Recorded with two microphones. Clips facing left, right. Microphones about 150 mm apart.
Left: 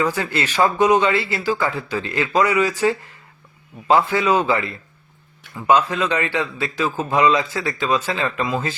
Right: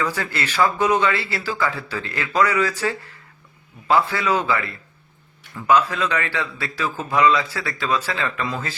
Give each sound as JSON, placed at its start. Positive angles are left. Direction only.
{"t": 0.0, "sound": "a man's voice", "side_deg": 15}